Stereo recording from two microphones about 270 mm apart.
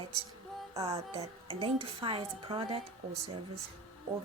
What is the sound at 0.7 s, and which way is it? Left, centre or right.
A woman's voice, centre.